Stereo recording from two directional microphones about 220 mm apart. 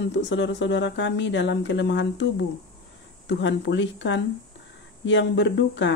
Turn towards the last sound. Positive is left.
turn(degrees=55)  # may be behind; listen again after turning